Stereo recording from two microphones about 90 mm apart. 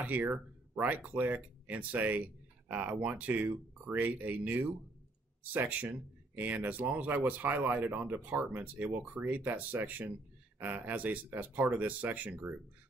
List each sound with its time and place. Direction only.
0.0 s speech: 20° right (ahead or behind)